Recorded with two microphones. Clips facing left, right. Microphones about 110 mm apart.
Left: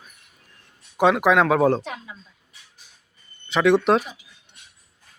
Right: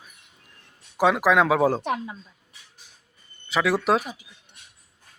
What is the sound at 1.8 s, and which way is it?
Speech, 55° right (ahead or behind).